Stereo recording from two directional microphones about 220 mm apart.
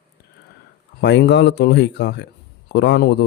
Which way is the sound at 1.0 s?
50° left (ahead or behind).